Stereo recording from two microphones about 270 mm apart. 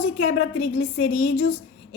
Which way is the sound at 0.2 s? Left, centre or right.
Left.